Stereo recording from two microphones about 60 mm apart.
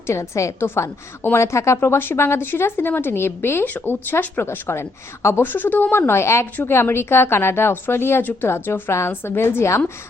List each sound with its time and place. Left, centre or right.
0.1 s a woman's voice: left
0.7 s a woman's voice: left
5.4 s a woman's voice: left